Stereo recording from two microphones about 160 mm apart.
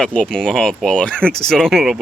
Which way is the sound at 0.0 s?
5° left (ahead or behind).